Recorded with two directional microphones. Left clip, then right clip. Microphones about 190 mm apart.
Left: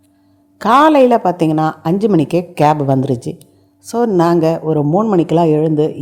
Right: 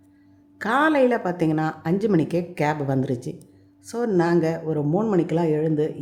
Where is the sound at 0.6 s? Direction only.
30° left (ahead or behind).